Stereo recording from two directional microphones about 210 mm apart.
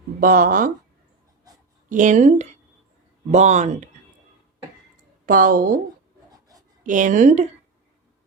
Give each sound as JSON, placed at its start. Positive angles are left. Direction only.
{"t": 0.2, "sound": "speech", "side_deg": -40}
{"t": 1.9, "sound": "speech", "side_deg": -35}
{"t": 5.2, "sound": "speech", "side_deg": -40}
{"t": 6.3, "sound": "writing", "side_deg": -15}
{"t": 6.8, "sound": "speech", "side_deg": -40}